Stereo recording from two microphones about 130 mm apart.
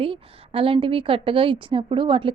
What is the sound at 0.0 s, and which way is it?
A woman's voice, 45° right (ahead or behind).